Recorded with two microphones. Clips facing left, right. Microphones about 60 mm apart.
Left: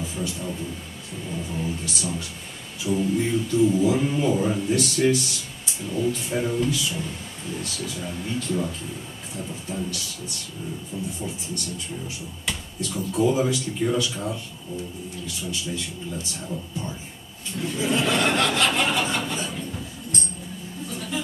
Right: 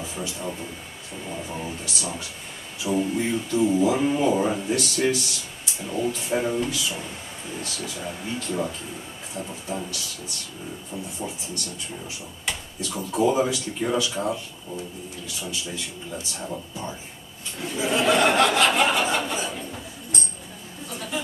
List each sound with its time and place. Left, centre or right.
0.0 s a sound: centre
0.4 s speech: centre
1.7 s speech: centre
5.9 s speech: centre
17.6 s speech: centre
20.9 s a sound: centre